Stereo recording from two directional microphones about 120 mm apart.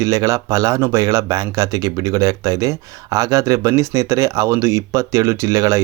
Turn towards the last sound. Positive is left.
turn(degrees=-25)  # may be behind; listen again after turning